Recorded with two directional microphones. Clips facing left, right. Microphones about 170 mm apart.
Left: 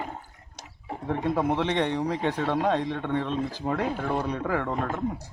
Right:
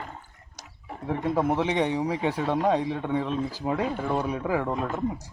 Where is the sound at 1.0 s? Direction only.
5° right (ahead or behind).